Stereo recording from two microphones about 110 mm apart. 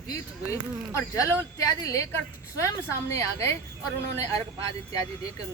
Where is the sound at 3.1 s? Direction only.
25° left (ahead or behind).